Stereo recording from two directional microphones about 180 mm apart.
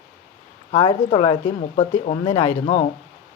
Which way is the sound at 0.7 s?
30° left (ahead or behind).